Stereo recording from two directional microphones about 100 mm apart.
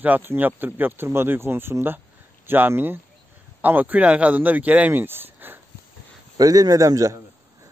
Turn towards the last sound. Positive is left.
turn(degrees=-35)  # may be behind; listen again after turning